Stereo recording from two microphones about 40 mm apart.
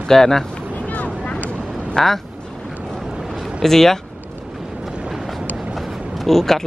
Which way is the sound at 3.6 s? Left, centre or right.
Centre.